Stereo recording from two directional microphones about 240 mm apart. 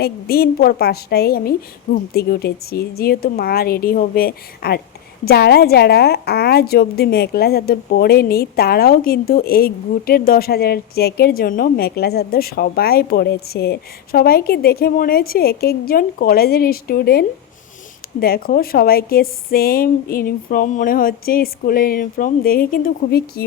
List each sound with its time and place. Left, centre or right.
0.0 s a woman's voice: left